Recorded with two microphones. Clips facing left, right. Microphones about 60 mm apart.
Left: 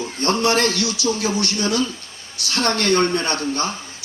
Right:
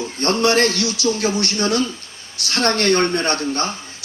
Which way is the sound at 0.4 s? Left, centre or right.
Right.